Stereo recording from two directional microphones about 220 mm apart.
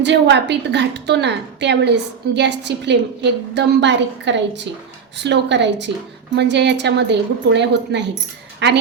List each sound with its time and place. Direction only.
0.0 s a woman's voice: 55° right (ahead or behind)